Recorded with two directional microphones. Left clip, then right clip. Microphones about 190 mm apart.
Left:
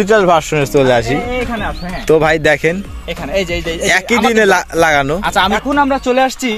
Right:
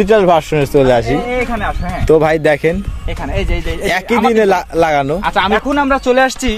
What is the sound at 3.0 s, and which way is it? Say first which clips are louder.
Speech: left 4 dB; 65° left (ahead or behind).